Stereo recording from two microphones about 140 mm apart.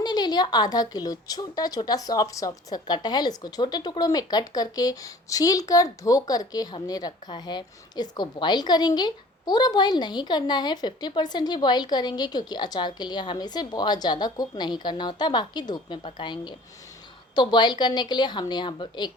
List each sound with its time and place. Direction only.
0.0 s a woman's voice: 30° left (ahead or behind)